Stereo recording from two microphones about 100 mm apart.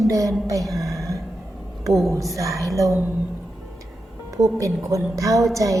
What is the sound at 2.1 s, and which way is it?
Speech, 35° right (ahead or behind).